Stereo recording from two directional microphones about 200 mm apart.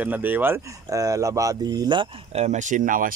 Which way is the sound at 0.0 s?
10° right (ahead or behind).